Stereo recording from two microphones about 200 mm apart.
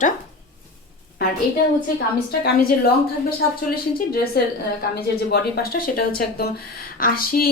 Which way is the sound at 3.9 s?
50° left (ahead or behind).